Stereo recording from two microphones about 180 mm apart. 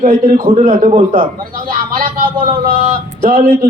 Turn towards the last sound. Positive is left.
turn(degrees=-45)  # may be behind; listen again after turning